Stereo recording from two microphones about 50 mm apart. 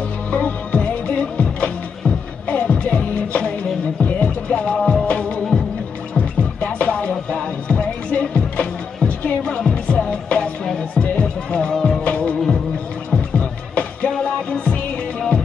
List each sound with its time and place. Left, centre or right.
0.3 s music: left
4.7 s music: centre
5.0 s music: left
9.4 s music: centre